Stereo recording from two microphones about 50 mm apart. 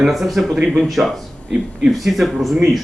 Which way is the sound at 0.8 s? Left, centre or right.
Centre.